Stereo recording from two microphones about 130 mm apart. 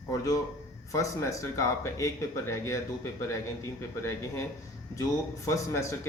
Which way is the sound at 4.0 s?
20° left (ahead or behind).